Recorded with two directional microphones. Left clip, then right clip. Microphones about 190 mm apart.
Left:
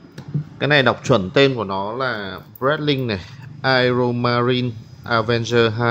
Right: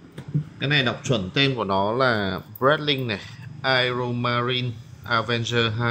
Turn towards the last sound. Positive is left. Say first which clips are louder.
# left 6 dB
turn(degrees=25)  # may be behind; listen again after turning